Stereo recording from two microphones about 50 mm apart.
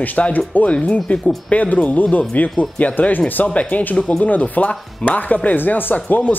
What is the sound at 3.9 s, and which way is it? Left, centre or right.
Speech, centre.